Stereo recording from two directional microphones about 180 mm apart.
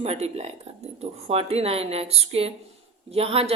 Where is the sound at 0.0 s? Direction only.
35° right (ahead or behind).